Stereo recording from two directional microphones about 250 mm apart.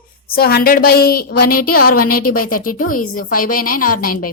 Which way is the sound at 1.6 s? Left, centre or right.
Left.